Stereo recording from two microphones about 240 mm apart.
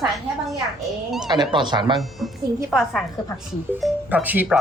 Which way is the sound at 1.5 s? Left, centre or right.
Centre.